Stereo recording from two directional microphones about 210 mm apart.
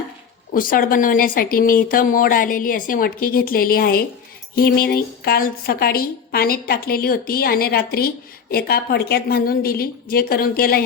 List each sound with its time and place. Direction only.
0.5 s a woman's voice: 40° left (ahead or behind)